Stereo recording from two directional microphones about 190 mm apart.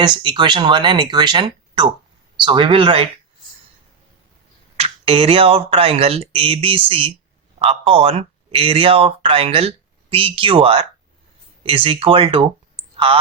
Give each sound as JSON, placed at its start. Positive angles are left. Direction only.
{"t": 0.0, "sound": "speech", "side_deg": -25}
{"t": 4.8, "sound": "speech", "side_deg": -30}